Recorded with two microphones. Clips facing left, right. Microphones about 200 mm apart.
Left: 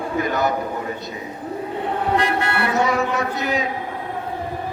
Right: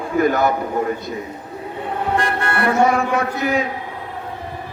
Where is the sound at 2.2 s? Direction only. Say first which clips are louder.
Right 1 dB; 50° right (ahead or behind).